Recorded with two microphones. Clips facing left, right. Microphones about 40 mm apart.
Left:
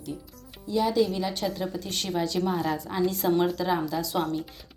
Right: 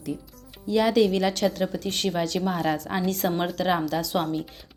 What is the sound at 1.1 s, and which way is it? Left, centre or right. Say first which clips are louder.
Speech: right 6 dB; right.